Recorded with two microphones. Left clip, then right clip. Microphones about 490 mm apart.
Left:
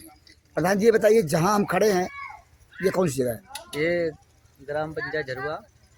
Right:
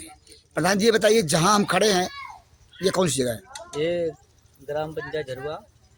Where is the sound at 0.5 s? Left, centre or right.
Left.